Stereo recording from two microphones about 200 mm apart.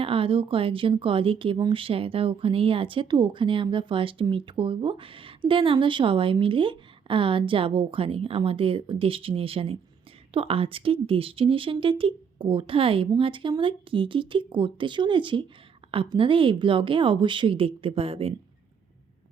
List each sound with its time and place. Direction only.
0.0 s speech: 25° right (ahead or behind)